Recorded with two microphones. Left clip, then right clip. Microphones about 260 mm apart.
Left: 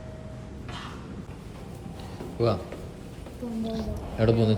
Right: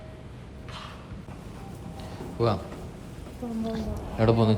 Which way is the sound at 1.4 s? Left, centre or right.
Centre.